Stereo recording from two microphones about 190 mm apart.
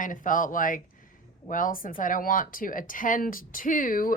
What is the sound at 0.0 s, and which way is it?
Speech, 45° left (ahead or behind).